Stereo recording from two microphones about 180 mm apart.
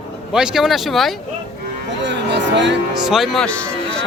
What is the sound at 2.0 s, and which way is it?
Music, 75° right (ahead or behind).